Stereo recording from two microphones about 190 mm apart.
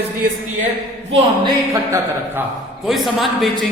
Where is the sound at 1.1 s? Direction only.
20° right (ahead or behind).